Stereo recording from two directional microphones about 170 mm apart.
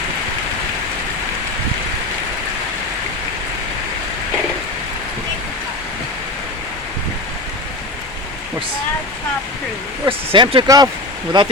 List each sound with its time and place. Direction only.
10.1 s speech: 30° right (ahead or behind)